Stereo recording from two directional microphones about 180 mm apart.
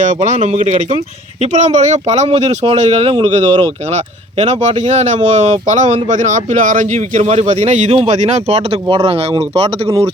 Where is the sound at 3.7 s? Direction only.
40° right (ahead or behind).